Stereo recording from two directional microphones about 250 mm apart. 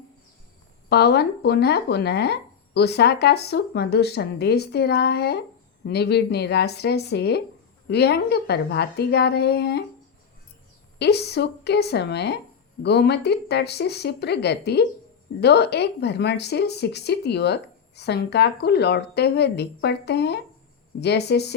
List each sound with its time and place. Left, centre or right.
0.9 s speech: left
10.9 s speech: left